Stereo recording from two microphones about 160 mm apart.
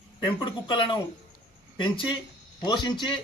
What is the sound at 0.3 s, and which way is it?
Speech, 30° left (ahead or behind).